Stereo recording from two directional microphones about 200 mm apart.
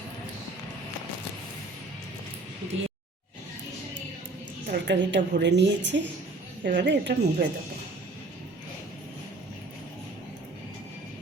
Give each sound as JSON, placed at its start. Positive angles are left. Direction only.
{"t": 4.7, "sound": "a woman's voice", "side_deg": -60}